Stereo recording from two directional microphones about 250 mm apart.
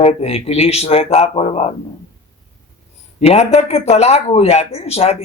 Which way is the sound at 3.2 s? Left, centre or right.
Left.